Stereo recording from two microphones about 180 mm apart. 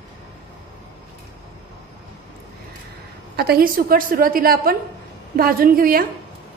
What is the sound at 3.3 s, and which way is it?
A woman's voice, 60° right (ahead or behind).